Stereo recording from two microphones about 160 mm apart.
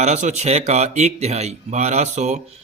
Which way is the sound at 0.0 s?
45° right (ahead or behind).